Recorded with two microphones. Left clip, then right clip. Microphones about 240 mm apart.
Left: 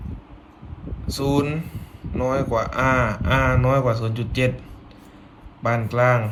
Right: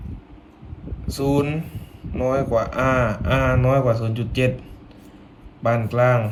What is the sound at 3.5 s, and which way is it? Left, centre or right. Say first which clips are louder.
Speech: right 1 dB; left.